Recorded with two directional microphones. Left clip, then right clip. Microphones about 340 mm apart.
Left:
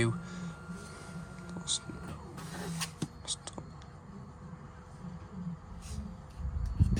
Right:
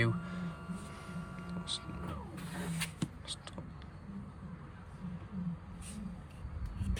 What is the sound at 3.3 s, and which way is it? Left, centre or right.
Whispering, centre.